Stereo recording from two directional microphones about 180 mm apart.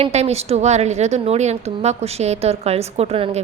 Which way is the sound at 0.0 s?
35° right (ahead or behind).